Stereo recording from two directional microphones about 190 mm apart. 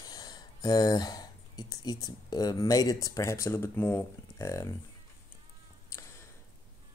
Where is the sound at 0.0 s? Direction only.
20° left (ahead or behind).